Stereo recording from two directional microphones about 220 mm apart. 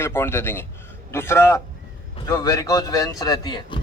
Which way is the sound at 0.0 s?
10° left (ahead or behind).